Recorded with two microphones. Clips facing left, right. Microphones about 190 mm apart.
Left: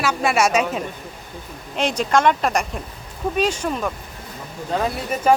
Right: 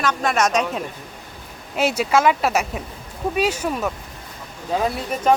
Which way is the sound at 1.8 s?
5° right (ahead or behind).